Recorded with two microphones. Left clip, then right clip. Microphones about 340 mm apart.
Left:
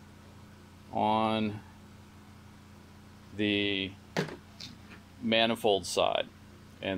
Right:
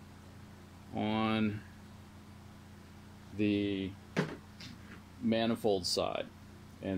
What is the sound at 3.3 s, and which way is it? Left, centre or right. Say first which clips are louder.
Speech: left 3 dB; left.